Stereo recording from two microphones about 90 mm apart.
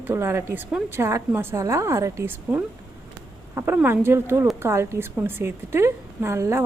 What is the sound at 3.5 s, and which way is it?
A woman's voice, 25° right (ahead or behind).